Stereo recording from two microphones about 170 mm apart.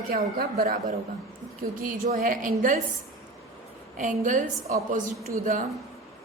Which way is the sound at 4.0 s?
50° right (ahead or behind).